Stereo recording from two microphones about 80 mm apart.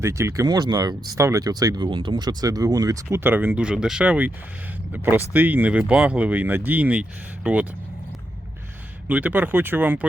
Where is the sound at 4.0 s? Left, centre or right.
Centre.